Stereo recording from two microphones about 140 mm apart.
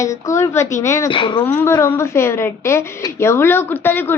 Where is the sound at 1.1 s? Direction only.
35° left (ahead or behind).